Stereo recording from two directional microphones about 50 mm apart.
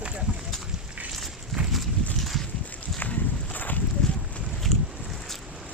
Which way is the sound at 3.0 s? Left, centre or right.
Left.